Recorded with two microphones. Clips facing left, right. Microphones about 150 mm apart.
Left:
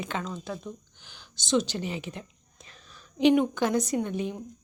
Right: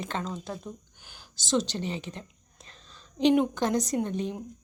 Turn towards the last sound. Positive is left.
turn(degrees=5)  # may be behind; listen again after turning